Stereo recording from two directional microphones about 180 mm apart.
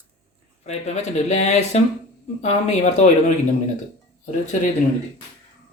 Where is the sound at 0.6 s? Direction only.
40° left (ahead or behind).